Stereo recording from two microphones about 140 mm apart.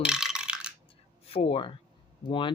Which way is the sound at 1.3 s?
40° left (ahead or behind).